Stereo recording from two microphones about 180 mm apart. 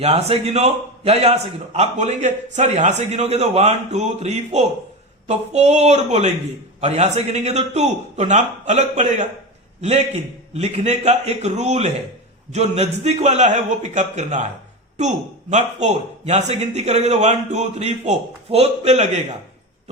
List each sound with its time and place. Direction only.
0.0 s a man's voice: 35° right (ahead or behind)
10.5 s a man's voice: 35° right (ahead or behind)